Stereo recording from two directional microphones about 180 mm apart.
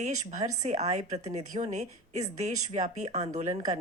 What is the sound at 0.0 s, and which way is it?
A woman's voice, 40° right (ahead or behind).